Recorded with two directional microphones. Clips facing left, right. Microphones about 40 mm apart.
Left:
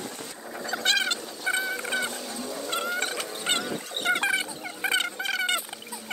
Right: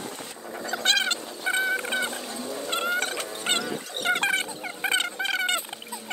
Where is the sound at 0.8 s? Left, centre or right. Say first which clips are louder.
Right 1 dB; right.